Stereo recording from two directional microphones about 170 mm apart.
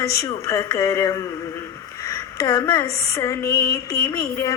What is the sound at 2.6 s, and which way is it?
Music, 15° left (ahead or behind).